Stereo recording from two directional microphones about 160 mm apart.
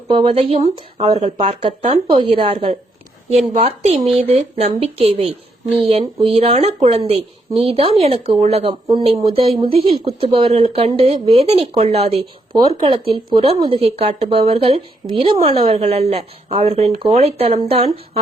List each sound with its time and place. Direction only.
0.1 s a woman's voice: 35° right (ahead or behind)